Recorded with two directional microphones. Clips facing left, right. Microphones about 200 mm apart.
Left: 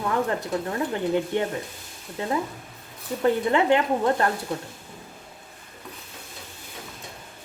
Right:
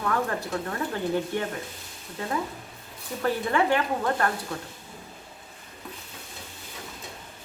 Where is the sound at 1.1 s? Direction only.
20° left (ahead or behind).